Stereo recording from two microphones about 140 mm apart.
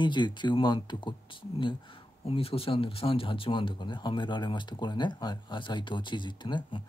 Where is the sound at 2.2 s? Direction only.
45° left (ahead or behind).